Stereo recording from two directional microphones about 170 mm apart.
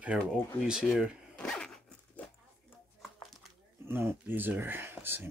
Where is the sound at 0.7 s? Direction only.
5° right (ahead or behind).